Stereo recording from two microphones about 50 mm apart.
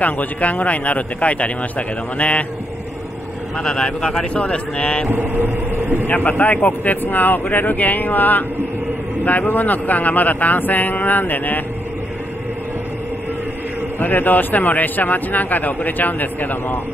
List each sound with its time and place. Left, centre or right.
0.0 s speech: left
3.5 s speech: centre
5.1 s speech: right
6.0 s speech: left
13.9 s speech: left